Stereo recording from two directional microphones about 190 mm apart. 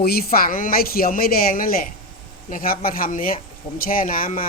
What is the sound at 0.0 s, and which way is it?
Speech, 55° left (ahead or behind).